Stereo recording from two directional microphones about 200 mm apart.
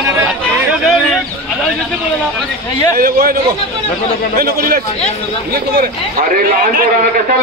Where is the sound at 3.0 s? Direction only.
45° right (ahead or behind).